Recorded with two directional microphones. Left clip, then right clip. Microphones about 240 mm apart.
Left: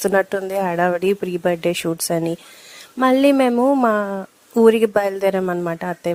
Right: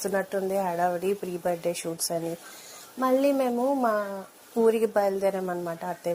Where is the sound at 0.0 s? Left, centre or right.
Left.